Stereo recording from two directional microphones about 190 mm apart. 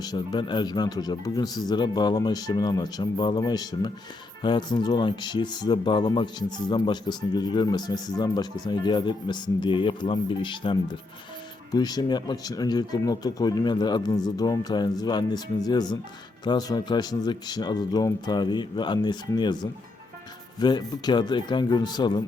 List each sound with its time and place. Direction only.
0.0 s speech: 20° left (ahead or behind)
20.6 s speech: 20° left (ahead or behind)